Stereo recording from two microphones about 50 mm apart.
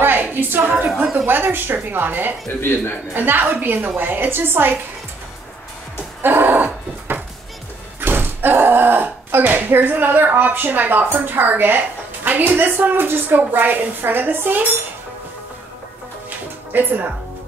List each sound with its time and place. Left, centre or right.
0.0 s a sound: right
1.1 s a woman's voice: right
2.6 s speech: left
3.2 s a woman's voice: right
6.2 s a sound: right
8.0 s a woman's voice: right
16.3 s music: right